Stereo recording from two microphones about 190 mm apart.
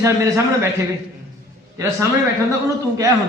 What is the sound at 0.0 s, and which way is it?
Speech, 15° right (ahead or behind).